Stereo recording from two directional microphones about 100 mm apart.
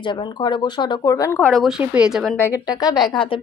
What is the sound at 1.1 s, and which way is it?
Speech, 35° left (ahead or behind).